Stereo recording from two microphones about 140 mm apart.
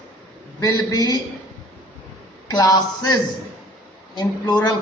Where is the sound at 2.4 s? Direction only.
25° left (ahead or behind).